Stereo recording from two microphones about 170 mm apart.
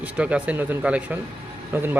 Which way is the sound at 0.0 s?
10° right (ahead or behind).